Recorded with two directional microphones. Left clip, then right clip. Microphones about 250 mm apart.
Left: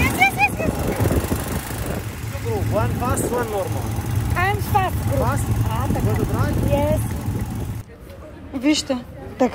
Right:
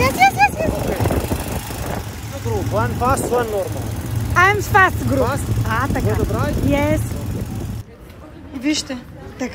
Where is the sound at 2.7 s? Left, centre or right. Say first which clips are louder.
Right 4 dB; right.